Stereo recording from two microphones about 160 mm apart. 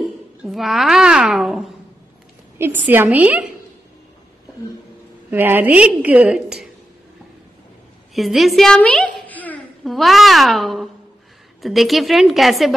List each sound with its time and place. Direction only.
0.4 s a woman's voice: centre (ahead or behind)
2.6 s a woman's voice: 15° right (ahead or behind)
5.3 s a woman's voice: 15° right (ahead or behind)
8.1 s a woman's voice: centre (ahead or behind)